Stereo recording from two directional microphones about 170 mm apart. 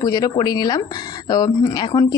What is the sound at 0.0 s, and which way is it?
A woman's voice, 20° left (ahead or behind).